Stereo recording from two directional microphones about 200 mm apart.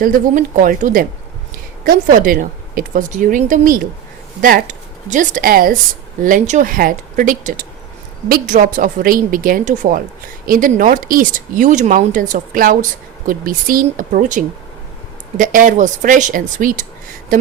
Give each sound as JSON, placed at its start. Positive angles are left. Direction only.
{"t": 0.0, "sound": "speech", "side_deg": -45}